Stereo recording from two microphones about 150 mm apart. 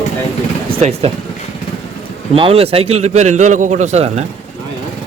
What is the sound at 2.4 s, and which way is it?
A man's voice, 40° right (ahead or behind).